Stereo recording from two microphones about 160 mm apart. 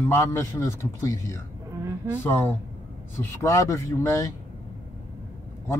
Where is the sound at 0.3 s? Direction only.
15° left (ahead or behind).